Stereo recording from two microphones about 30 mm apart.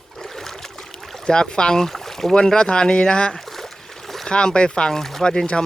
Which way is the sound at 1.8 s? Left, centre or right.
Centre.